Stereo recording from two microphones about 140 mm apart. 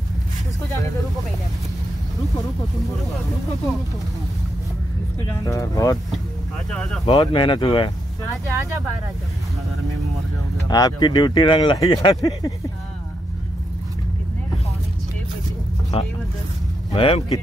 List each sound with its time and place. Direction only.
5.3 s speech: 25° left (ahead or behind)
6.7 s speech: 5° left (ahead or behind)
7.1 s speech: 35° left (ahead or behind)
10.7 s speech: 30° left (ahead or behind)
15.9 s speech: 45° left (ahead or behind)